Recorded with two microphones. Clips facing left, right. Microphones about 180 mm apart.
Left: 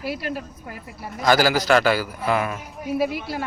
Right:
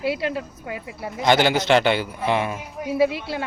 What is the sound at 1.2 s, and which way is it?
A man's voice, 25° right (ahead or behind).